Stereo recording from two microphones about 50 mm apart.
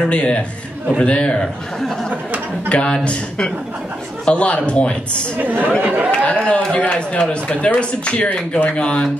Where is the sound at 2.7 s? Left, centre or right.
Left.